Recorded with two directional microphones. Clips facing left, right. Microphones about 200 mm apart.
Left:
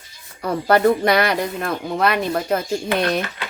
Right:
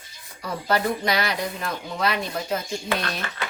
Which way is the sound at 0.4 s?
55° left (ahead or behind).